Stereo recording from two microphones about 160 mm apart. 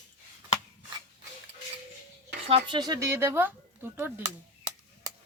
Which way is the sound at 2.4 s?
40° right (ahead or behind).